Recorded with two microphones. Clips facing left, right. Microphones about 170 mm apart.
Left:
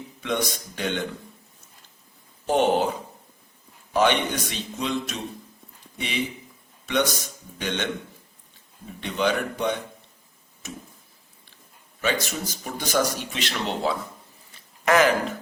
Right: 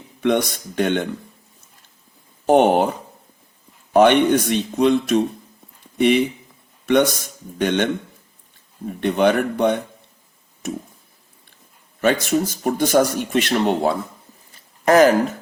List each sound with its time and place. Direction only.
0.2 s speech: 60° right (ahead or behind)
2.5 s speech: 55° right (ahead or behind)
3.9 s speech: 55° right (ahead or behind)
6.8 s speech: 55° right (ahead or behind)
8.9 s speech: 55° right (ahead or behind)
11.9 s speech: 55° right (ahead or behind)
14.5 s a sound: 40° right (ahead or behind)